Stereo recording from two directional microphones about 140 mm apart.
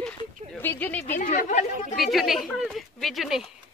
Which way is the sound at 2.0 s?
Centre (ahead or behind).